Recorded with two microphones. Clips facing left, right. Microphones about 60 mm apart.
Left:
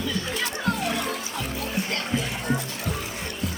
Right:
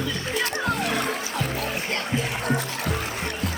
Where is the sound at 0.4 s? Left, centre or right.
Right.